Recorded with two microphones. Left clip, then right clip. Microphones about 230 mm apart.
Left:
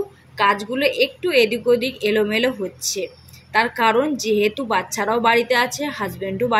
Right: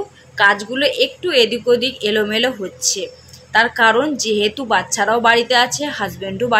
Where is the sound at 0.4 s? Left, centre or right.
Left.